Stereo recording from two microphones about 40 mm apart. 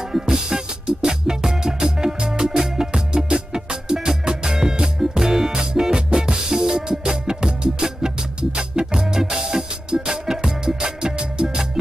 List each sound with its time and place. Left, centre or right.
0.1 s music: centre